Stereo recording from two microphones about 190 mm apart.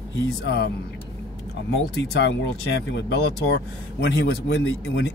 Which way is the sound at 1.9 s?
65° left (ahead or behind).